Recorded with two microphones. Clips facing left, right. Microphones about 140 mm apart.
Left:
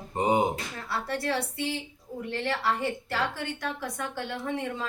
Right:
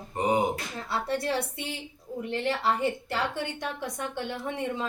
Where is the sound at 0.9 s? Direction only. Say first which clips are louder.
Right 1 dB; 25° right (ahead or behind).